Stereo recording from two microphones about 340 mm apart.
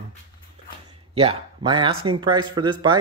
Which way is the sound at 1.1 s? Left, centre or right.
Centre.